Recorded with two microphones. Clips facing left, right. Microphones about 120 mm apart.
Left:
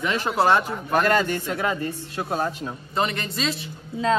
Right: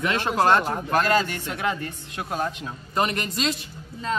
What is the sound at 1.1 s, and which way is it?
Speech, 50° left (ahead or behind).